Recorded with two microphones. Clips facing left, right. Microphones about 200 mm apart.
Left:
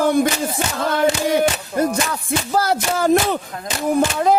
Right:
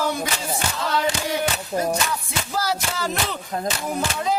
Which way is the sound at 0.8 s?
55° left (ahead or behind).